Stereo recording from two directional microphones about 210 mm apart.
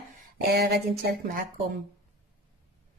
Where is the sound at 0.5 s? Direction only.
50° right (ahead or behind).